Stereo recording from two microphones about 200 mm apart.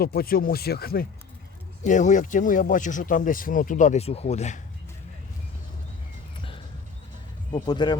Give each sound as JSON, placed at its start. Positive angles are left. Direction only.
{"t": 0.0, "sound": "speech", "side_deg": 50}
{"t": 1.8, "sound": "speech", "side_deg": 40}
{"t": 7.5, "sound": "speech", "side_deg": 20}